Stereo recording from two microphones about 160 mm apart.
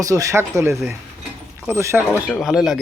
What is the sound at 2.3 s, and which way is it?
Speech, centre (ahead or behind).